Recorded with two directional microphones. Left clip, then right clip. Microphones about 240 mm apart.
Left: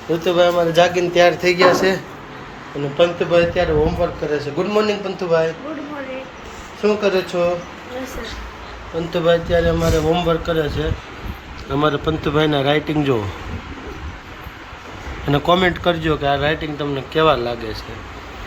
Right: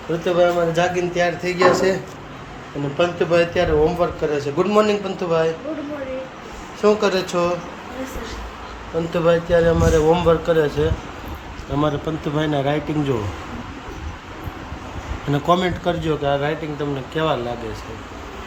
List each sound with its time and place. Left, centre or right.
0.3 s speech: centre
3.0 s speech: centre
6.8 s speech: centre
9.1 s speech: centre
15.3 s speech: centre